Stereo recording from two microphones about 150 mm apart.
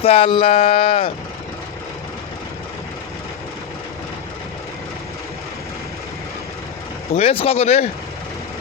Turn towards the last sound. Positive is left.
turn(degrees=45)  # may be behind; listen again after turning